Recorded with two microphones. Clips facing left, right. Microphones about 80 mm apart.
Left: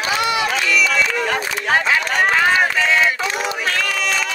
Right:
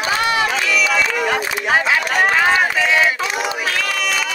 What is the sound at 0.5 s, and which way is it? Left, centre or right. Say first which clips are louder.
Speech: even; centre.